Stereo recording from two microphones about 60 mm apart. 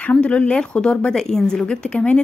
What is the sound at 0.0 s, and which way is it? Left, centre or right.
A woman's voice, centre.